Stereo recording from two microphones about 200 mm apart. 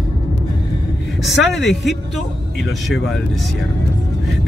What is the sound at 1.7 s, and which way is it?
Speech, centre (ahead or behind).